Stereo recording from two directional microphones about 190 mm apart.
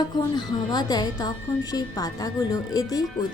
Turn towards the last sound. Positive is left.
turn(degrees=20)  # may be behind; listen again after turning